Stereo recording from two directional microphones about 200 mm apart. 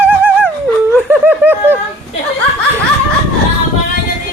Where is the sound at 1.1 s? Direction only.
10° right (ahead or behind).